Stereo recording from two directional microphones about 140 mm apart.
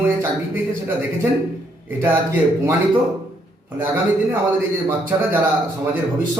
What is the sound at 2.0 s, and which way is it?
Speech, 15° right (ahead or behind).